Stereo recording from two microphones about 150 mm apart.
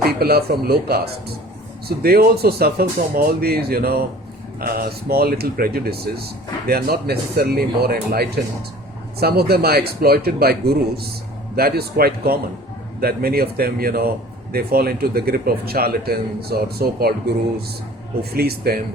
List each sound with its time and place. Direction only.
0.2 s a man's voice: 90° right
18.2 s a man's voice: 90° right